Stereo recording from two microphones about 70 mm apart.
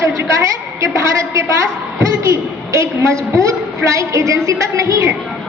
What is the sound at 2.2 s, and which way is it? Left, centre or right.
A woman's voice, right.